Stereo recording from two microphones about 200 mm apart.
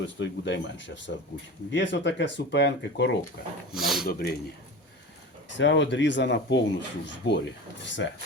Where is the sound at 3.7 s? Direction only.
Centre (ahead or behind).